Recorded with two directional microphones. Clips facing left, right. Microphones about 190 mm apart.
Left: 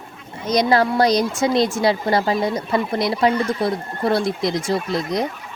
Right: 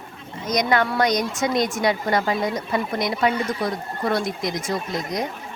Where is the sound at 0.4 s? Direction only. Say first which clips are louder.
Left 4 dB; 30° left (ahead or behind).